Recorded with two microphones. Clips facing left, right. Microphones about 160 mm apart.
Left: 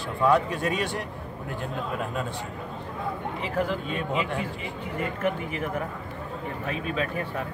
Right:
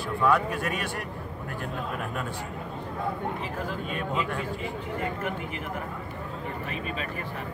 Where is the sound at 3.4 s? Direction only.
80° left.